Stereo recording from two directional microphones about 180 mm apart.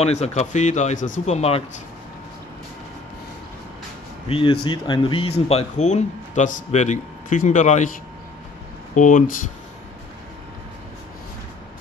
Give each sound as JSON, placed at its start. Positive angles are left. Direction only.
{"t": 0.0, "sound": "speech", "side_deg": 40}
{"t": 4.3, "sound": "speech", "side_deg": 30}
{"t": 8.9, "sound": "speech", "side_deg": 45}